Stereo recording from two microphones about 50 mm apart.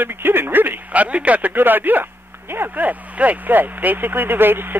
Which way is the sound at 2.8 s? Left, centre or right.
Right.